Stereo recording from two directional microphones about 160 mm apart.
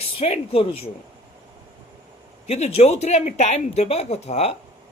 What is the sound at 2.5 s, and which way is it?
Speech, 40° left (ahead or behind).